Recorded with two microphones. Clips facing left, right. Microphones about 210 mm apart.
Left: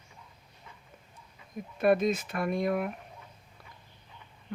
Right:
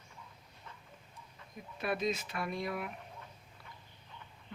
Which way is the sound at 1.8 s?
50° left (ahead or behind).